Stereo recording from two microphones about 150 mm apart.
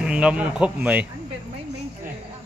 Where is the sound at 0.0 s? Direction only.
10° right (ahead or behind).